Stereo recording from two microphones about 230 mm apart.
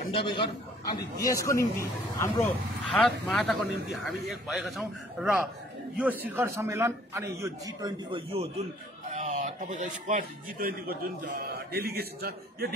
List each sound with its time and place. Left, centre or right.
0.1 s a man's voice: left
2.9 s a man's voice: centre; by 12.6 s right